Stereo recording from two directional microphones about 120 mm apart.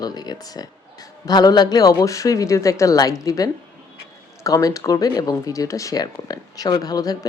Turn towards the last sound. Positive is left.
turn(degrees=30)  # may be behind; listen again after turning